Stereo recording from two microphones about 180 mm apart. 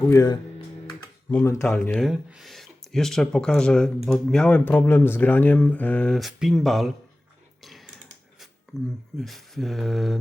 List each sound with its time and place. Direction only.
0.1 s speech: 20° left (ahead or behind)
0.9 s computer keyboard: 15° left (ahead or behind)
1.7 s speech: 5° left (ahead or behind)
7.6 s a sound: centre (ahead or behind)
9.1 s speech: centre (ahead or behind)